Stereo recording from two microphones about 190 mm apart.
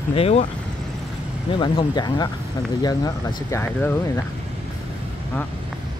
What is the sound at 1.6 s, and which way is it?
Speech, 25° left (ahead or behind).